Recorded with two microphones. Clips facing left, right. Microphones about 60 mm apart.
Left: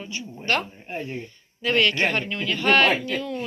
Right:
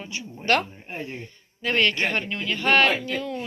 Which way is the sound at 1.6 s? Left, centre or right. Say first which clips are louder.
Left 1 dB; right.